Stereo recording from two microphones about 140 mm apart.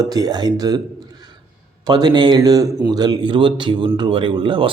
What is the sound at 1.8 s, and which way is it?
Speech, 30° right (ahead or behind).